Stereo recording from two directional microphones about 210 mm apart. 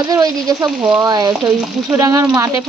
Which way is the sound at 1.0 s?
20° right (ahead or behind).